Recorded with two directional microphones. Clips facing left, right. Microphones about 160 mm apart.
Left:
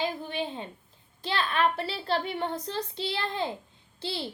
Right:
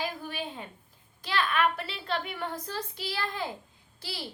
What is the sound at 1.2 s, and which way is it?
A child's voice, 30° left (ahead or behind).